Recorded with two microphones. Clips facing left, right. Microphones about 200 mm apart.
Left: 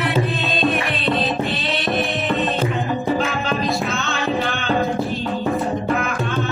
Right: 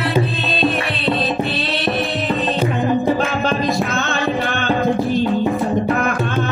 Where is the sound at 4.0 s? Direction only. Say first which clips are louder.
Right 2 dB; centre (ahead or behind).